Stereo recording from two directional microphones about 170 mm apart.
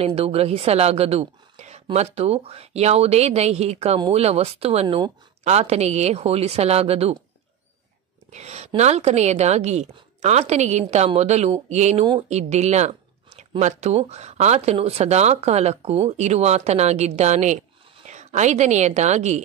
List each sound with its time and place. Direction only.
0.0 s speech: 35° right (ahead or behind)
8.3 s a woman's voice: 40° right (ahead or behind)